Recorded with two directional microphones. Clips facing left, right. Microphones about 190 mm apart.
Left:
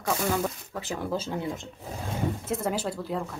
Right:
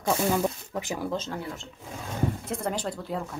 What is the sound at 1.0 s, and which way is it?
Speech, 10° left (ahead or behind).